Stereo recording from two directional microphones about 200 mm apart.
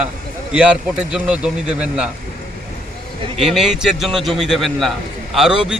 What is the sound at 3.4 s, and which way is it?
Speech, centre (ahead or behind).